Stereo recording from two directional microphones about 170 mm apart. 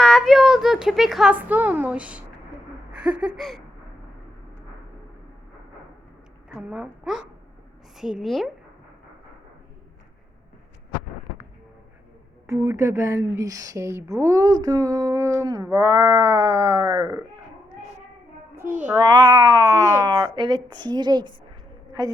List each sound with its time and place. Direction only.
0.0 s a woman's voice: centre (ahead or behind)
6.5 s a woman's voice: 5° right (ahead or behind)
12.6 s speech: 15° right (ahead or behind)
18.5 s a sound: 15° right (ahead or behind)
18.9 s speech: 20° right (ahead or behind)